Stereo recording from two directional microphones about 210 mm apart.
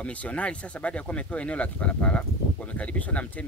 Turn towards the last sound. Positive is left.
turn(degrees=5)  # may be behind; listen again after turning